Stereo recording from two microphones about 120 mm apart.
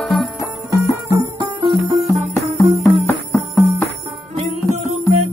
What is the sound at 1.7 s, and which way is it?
Music, 25° right (ahead or behind).